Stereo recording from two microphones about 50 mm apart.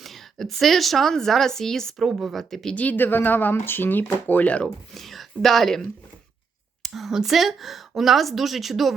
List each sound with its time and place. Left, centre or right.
0.0 s a woman's voice: centre
2.7 s speech: left
4.9 s a woman's voice: centre